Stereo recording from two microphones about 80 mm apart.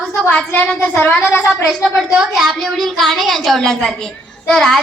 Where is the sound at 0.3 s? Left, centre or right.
Left.